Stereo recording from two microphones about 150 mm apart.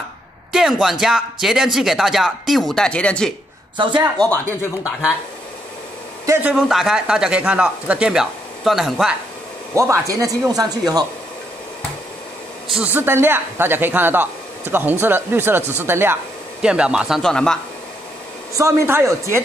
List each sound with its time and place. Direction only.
0.5 s speech: 5° right (ahead or behind)
3.7 s speech: 30° right (ahead or behind)
4.0 s speech: 20° right (ahead or behind)
6.2 s a man's voice: 20° right (ahead or behind)
6.5 s speech: 5° right (ahead or behind)
9.8 s speech: 20° right (ahead or behind)
12.7 s speech: 10° right (ahead or behind); by 17.6 s 5° left (ahead or behind)
18.6 s speech: 20° right (ahead or behind)